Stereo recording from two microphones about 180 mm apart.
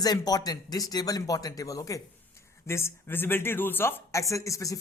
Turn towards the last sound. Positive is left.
turn(degrees=20)  # may be behind; listen again after turning